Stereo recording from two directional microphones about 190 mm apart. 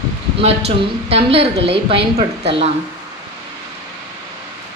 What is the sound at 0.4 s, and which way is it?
A woman's voice, 30° right (ahead or behind).